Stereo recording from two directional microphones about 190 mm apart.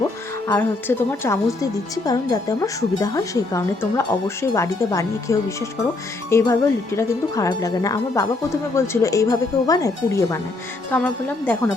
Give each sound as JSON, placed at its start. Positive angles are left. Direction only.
{"t": 0.4, "sound": "a woman's voice", "side_deg": 10}